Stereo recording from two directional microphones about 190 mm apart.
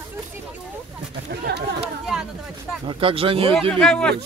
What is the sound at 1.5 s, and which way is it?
Chatter, 60° right (ahead or behind).